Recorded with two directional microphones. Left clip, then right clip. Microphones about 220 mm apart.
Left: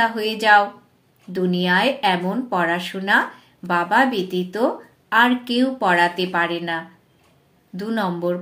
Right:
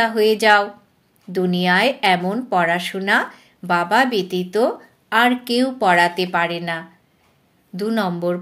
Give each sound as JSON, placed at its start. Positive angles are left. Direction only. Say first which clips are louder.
{"t": 0.0, "sound": "speech", "louder": "right 4 dB", "side_deg": -40}